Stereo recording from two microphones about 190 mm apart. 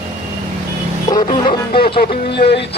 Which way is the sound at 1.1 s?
25° left (ahead or behind).